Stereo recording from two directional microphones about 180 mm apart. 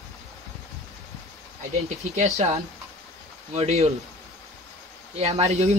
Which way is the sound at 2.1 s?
40° right (ahead or behind).